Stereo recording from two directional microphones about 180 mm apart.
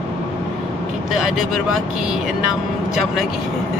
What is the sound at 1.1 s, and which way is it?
Speech, 5° right (ahead or behind).